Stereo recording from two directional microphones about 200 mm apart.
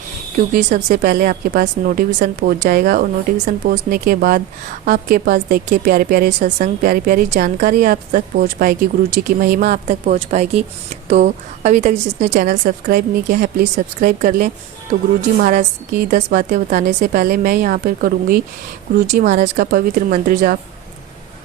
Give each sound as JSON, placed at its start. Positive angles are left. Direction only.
{"t": 0.3, "sound": "speech", "side_deg": -40}